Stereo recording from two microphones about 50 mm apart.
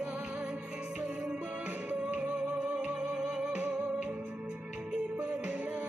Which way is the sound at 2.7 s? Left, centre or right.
Right.